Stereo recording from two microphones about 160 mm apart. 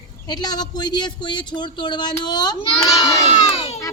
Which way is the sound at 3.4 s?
40° left (ahead or behind).